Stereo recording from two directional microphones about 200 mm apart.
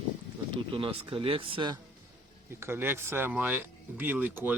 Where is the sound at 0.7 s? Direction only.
25° right (ahead or behind).